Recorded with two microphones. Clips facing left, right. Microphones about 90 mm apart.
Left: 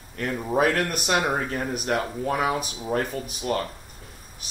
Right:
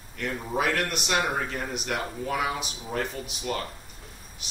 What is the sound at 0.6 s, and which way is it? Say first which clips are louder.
Speech: left 4 dB; 45° left (ahead or behind).